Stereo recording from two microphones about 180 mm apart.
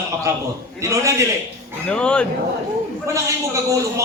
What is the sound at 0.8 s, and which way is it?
Speech, 15° right (ahead or behind).